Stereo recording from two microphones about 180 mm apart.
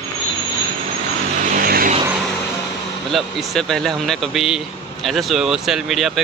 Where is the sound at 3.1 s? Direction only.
Centre (ahead or behind).